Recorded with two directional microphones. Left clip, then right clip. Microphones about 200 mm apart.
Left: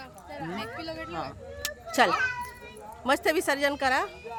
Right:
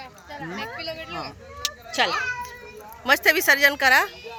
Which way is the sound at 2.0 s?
35° left (ahead or behind).